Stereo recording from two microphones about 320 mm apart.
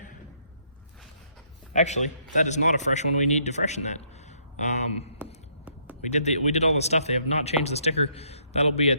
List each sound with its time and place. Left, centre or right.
1.7 s a man's voice: left
5.1 s whispering: centre
6.1 s speech: left